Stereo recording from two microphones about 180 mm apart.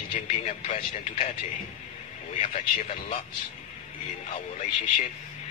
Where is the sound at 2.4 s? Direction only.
45° left (ahead or behind).